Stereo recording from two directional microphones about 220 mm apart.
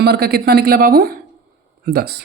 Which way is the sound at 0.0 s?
45° right (ahead or behind).